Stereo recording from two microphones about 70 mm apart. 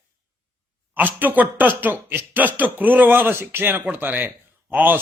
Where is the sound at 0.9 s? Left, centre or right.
Right.